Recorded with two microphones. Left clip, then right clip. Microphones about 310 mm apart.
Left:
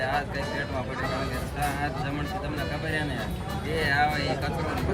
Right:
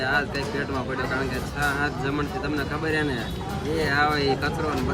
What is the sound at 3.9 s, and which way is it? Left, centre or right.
Speech, left.